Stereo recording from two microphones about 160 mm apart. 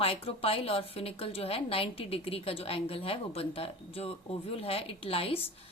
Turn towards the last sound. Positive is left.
turn(degrees=35)  # may be behind; listen again after turning